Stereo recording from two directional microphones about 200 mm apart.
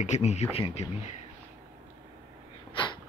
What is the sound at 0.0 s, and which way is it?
Speech, 35° left (ahead or behind).